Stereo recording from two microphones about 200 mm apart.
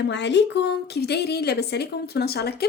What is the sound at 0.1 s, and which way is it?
A woman's voice, 60° left (ahead or behind).